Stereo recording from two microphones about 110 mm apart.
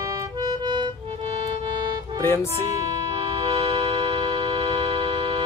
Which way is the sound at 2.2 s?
25° left (ahead or behind).